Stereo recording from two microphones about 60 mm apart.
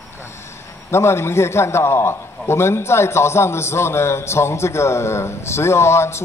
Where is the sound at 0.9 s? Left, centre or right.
Left.